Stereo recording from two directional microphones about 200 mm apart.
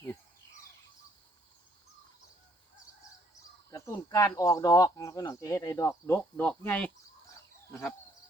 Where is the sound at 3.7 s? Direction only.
15° left (ahead or behind).